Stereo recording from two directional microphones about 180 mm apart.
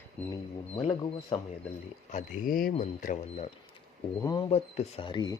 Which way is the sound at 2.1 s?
50° left (ahead or behind).